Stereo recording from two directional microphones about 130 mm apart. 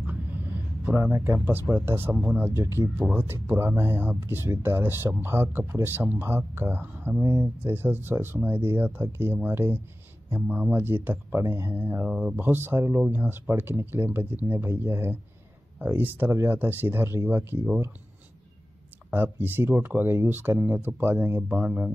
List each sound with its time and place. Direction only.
0.8 s speech: 10° right (ahead or behind)
19.0 s speech: 15° right (ahead or behind)